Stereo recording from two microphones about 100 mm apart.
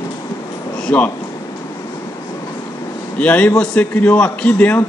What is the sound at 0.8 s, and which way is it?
Speech, 15° left (ahead or behind).